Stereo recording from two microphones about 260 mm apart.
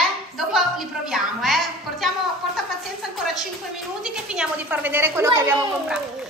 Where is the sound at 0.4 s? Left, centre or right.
Centre.